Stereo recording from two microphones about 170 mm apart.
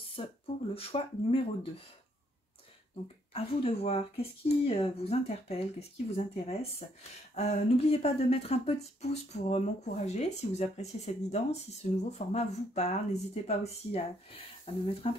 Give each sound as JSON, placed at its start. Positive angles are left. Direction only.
{"t": 0.2, "sound": "speech", "side_deg": 30}
{"t": 3.3, "sound": "speech", "side_deg": 35}